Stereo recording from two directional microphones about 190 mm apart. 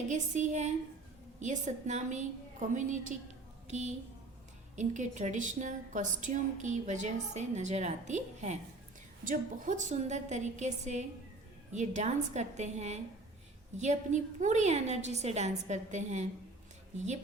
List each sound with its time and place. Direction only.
0.1 s a woman's voice: 40° right (ahead or behind)